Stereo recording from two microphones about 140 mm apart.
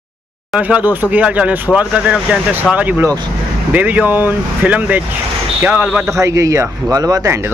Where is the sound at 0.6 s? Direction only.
10° right (ahead or behind).